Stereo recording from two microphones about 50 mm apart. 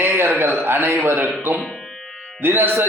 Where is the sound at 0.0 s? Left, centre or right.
Right.